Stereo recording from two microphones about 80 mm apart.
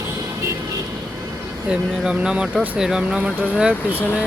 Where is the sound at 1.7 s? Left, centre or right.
Centre.